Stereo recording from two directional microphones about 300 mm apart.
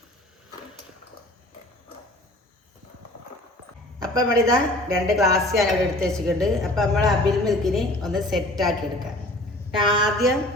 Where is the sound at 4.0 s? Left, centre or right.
Centre.